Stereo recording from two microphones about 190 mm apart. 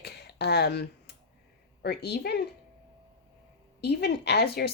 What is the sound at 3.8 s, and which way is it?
Speech, 60° left (ahead or behind).